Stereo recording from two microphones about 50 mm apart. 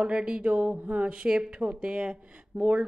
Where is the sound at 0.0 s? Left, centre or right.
Centre.